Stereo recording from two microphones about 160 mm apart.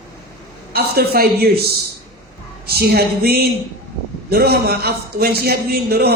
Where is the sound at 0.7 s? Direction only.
75° right (ahead or behind).